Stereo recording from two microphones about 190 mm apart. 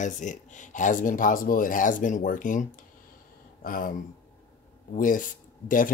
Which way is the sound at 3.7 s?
45° left (ahead or behind).